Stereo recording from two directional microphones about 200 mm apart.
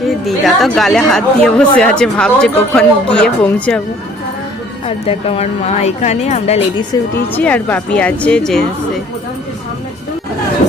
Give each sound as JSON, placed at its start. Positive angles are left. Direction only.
{"t": 0.3, "sound": "speech", "side_deg": 0}
{"t": 4.9, "sound": "speech", "side_deg": 30}
{"t": 6.9, "sound": "speech", "side_deg": 20}
{"t": 7.3, "sound": "speech", "side_deg": 10}